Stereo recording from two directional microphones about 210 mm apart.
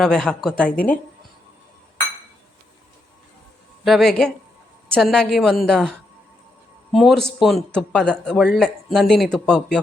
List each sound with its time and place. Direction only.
0.0 s a man's voice: 5° left (ahead or behind)
3.8 s a man's voice: centre (ahead or behind)
6.9 s a man's voice: centre (ahead or behind)